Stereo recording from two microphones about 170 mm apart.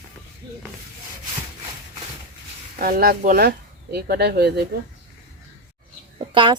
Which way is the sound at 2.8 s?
60° right (ahead or behind).